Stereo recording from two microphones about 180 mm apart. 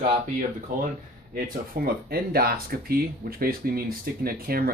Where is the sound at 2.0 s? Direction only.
60° right (ahead or behind).